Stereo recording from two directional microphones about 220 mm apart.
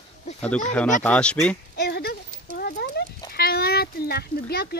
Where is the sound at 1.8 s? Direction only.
45° left (ahead or behind).